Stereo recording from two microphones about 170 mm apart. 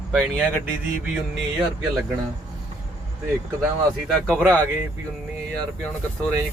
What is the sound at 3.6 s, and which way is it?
Speech, 10° right (ahead or behind).